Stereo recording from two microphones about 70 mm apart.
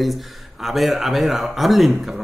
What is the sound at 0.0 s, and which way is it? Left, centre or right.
Speech, centre.